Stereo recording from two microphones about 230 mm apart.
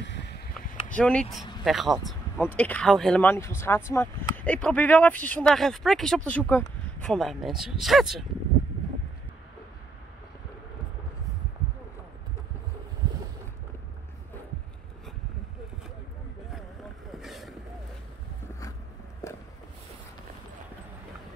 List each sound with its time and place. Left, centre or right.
0.0 s a sound: left
0.9 s speech: centre
17.1 s vehicle: centre
19.2 s walk: centre